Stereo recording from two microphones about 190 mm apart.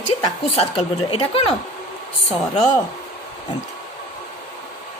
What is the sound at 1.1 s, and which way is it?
Speech, 30° left (ahead or behind).